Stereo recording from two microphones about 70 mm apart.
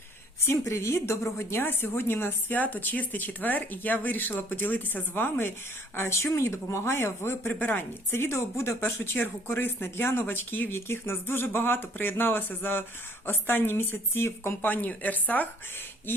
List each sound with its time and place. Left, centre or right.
0.3 s a woman's voice: left